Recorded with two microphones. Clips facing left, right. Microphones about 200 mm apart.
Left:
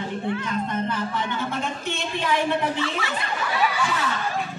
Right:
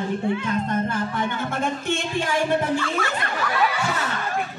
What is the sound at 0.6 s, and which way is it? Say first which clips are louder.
Speech: right 2 dB; 45° right (ahead or behind).